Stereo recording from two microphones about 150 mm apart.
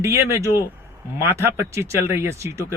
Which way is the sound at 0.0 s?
20° right (ahead or behind).